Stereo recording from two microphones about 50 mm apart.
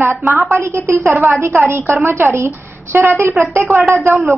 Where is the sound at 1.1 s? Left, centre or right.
Right.